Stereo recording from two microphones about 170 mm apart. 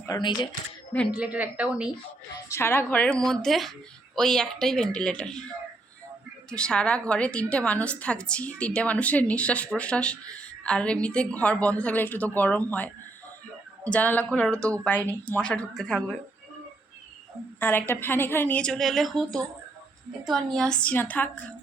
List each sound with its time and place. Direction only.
0.0 s speech: 25° left (ahead or behind)
1.1 s speech: 5° right (ahead or behind)
2.5 s a woman's voice: 15° left (ahead or behind)
6.5 s a woman's voice: 5° left (ahead or behind)
17.6 s a woman's voice: 10° left (ahead or behind)